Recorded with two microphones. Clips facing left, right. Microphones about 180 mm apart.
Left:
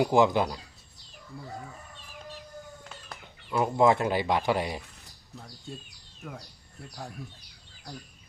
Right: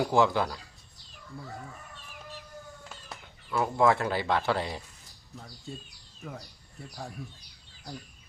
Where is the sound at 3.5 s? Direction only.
20° left (ahead or behind).